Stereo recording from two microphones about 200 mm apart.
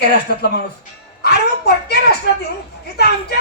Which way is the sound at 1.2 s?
55° left (ahead or behind).